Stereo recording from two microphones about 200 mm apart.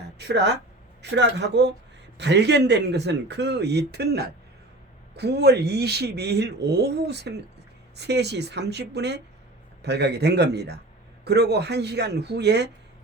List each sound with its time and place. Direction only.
0.2 s speech: 55° right (ahead or behind)